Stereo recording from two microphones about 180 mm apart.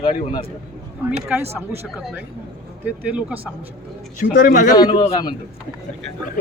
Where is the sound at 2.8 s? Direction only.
10° right (ahead or behind).